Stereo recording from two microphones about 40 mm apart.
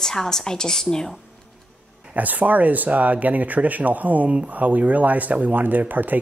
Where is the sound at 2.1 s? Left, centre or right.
Right.